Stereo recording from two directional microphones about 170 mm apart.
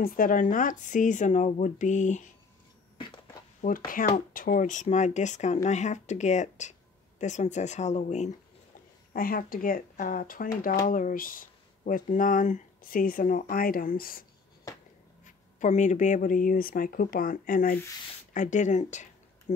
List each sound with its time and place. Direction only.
0.0 s speech: 55° left (ahead or behind)
3.6 s speech: 55° left (ahead or behind)
9.1 s speech: 60° left (ahead or behind)
15.2 s speech: 45° left (ahead or behind)
18.3 s speech: 45° left (ahead or behind)